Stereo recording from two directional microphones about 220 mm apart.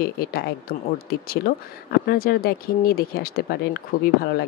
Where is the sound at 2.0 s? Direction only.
45° left (ahead or behind).